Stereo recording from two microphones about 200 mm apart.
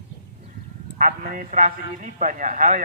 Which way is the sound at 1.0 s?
45° right (ahead or behind).